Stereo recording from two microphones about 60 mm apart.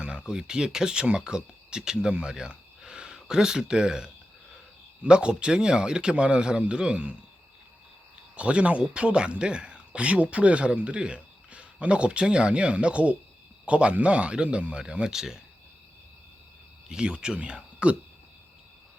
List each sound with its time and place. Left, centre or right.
0.0 s a man's voice: centre
8.4 s a man's voice: centre
16.9 s a man's voice: centre